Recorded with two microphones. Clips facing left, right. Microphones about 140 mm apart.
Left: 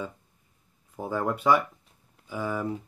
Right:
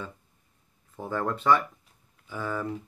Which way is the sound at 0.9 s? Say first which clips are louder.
Left 1 dB; 10° left (ahead or behind).